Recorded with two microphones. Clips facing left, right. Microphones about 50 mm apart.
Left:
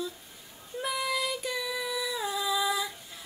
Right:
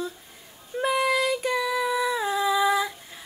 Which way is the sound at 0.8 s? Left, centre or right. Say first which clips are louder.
Right 8 dB; right.